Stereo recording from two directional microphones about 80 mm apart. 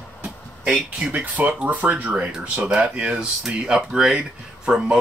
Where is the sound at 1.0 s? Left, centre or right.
Right.